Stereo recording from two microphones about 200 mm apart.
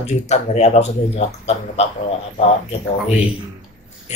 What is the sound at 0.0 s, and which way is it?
Speech, 35° left (ahead or behind).